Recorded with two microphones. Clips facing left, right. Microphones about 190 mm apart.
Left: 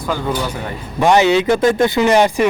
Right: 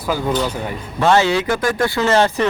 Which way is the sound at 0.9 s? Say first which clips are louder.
Left 3 dB; 15° left (ahead or behind).